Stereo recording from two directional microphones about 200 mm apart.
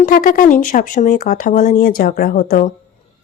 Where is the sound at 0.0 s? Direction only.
40° left (ahead or behind).